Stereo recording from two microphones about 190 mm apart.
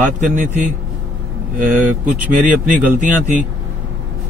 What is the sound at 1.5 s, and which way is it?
Speech, 40° right (ahead or behind).